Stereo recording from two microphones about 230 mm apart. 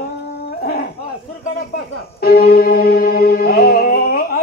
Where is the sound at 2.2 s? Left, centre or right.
Left.